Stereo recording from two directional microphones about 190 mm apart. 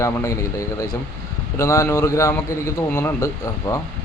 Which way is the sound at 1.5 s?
15° left (ahead or behind).